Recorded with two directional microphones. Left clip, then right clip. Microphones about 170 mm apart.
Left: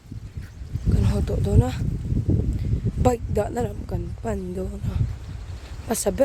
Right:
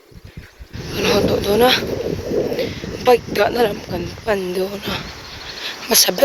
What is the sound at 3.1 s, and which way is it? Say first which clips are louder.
Speech: right 11 dB; 15° left (ahead or behind).